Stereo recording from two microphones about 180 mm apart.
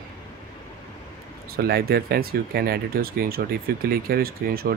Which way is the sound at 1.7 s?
60° right (ahead or behind).